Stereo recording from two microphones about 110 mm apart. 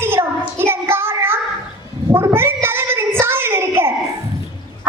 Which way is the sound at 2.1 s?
20° right (ahead or behind).